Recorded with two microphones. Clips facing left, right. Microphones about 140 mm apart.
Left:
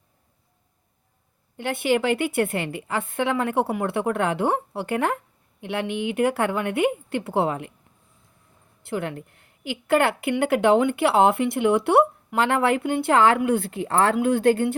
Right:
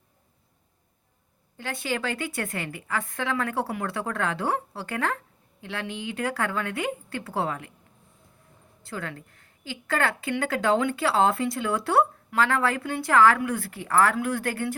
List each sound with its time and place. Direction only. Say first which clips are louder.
1.5 s a woman's voice: left 8 dB; 25° left (ahead or behind)
8.9 s a woman's voice: left 7 dB; 20° left (ahead or behind)